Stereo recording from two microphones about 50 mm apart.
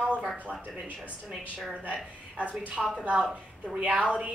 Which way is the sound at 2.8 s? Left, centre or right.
Centre.